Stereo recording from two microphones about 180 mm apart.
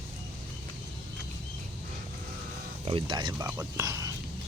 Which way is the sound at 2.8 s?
30° right (ahead or behind).